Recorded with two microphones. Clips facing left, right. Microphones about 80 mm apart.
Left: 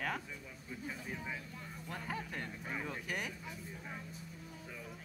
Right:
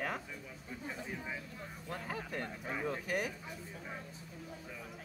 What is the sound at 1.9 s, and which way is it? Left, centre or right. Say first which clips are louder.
A man's voice: right 1 dB; right.